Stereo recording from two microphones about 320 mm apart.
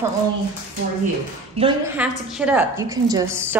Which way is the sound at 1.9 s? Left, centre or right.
Centre.